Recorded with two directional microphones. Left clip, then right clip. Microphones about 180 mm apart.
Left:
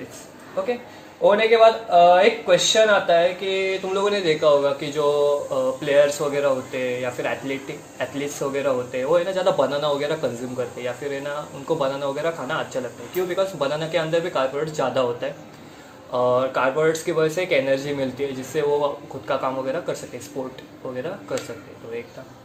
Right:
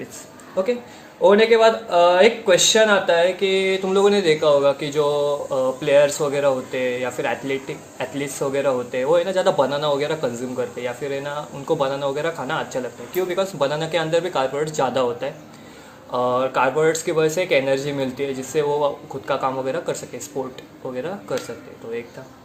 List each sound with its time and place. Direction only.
1.2 s speech: 50° right (ahead or behind)